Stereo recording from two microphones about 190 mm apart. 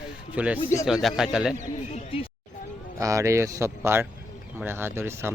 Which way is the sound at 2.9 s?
15° right (ahead or behind).